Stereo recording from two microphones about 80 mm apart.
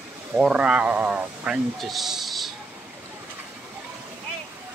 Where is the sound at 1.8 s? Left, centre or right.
Centre.